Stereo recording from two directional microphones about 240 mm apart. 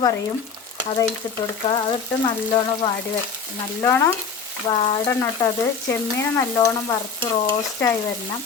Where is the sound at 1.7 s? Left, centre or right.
Centre.